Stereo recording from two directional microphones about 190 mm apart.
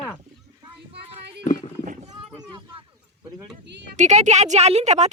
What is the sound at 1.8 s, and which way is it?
Clip-clop, 40° right (ahead or behind).